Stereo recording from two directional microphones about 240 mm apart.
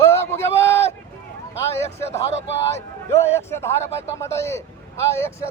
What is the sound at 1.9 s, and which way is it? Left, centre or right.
A man's voice, centre.